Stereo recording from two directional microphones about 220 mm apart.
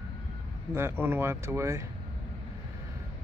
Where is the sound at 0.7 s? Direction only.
10° right (ahead or behind).